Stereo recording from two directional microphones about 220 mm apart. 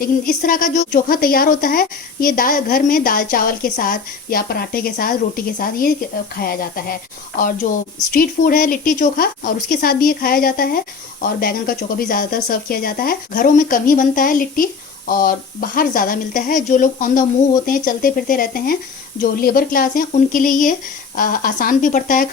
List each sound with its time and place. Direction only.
0.0 s a woman's voice: 40° left (ahead or behind)